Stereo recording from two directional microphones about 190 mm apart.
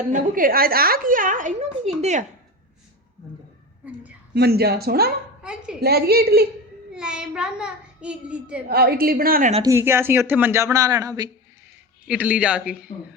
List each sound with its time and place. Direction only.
0.1 s a woman's voice: 45° right (ahead or behind)
3.8 s a woman's voice: 10° right (ahead or behind)
4.4 s speech: 55° right (ahead or behind)
5.4 s a woman's voice: 5° right (ahead or behind)
5.8 s speech: 55° right (ahead or behind)
6.9 s a child's voice: 5° right (ahead or behind)
8.6 s a woman's voice: 55° right (ahead or behind)
9.6 s speech: 15° right (ahead or behind)
12.0 s speech: 10° right (ahead or behind)